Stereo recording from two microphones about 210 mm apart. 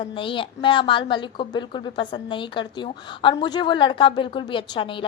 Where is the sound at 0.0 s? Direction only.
25° left (ahead or behind).